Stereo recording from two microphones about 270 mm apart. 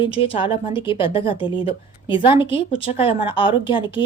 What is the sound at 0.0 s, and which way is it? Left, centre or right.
A woman's voice, centre.